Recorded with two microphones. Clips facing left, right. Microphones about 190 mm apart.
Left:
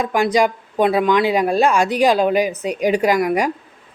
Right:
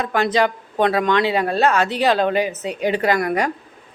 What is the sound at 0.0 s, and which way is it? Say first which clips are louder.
Speech: left 2 dB; 10° left (ahead or behind).